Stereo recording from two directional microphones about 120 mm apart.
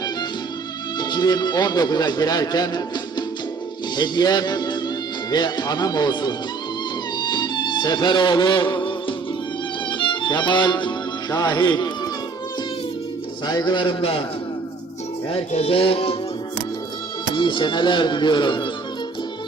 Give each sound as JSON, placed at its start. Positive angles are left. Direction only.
{"t": 0.9, "sound": "speech", "side_deg": 35}
{"t": 7.2, "sound": "music", "side_deg": 35}
{"t": 13.5, "sound": "speech", "side_deg": 35}
{"t": 15.3, "sound": "music", "side_deg": 55}
{"t": 17.3, "sound": "speech", "side_deg": 40}